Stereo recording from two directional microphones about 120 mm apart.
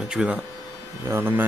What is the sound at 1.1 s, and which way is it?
Speech, 20° right (ahead or behind).